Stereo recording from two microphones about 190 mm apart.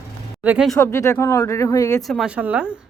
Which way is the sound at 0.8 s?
15° left (ahead or behind).